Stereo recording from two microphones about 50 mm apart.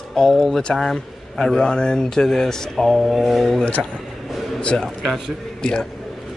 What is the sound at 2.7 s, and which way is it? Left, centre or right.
Speech, centre.